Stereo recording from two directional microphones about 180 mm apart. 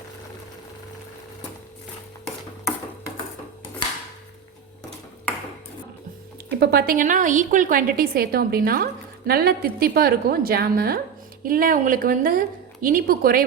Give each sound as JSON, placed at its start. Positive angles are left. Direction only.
{"t": 6.5, "sound": "a woman's voice", "side_deg": -60}